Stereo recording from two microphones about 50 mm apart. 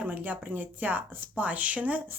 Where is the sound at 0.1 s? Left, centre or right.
Right.